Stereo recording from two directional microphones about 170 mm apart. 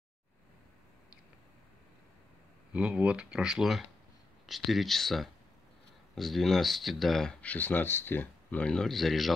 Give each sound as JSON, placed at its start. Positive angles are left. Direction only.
{"t": 2.7, "sound": "speech", "side_deg": -5}